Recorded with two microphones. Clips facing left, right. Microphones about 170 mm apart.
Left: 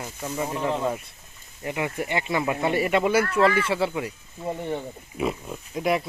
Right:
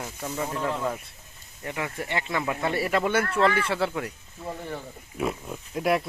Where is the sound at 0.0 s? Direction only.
Centre (ahead or behind).